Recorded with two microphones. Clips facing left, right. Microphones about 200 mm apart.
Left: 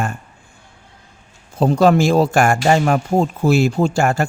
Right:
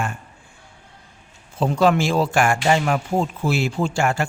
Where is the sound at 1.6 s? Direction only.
40° left (ahead or behind).